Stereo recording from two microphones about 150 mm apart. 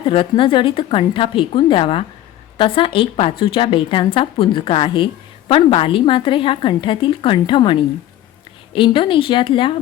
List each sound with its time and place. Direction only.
0.0 s a woman's voice: 35° left (ahead or behind)